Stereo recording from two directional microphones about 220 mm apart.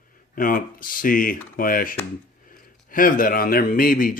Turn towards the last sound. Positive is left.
turn(degrees=40)  # may be behind; listen again after turning